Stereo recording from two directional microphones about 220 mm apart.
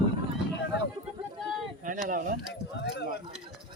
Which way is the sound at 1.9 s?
35° right (ahead or behind).